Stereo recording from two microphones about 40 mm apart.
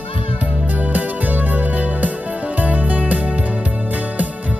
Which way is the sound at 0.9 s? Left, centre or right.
Right.